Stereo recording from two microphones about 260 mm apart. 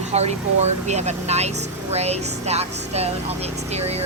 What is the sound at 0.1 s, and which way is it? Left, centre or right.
A woman's voice, right.